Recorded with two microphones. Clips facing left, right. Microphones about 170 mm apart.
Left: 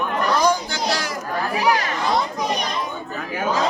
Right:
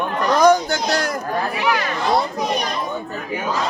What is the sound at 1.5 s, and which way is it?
Speech, 40° left (ahead or behind).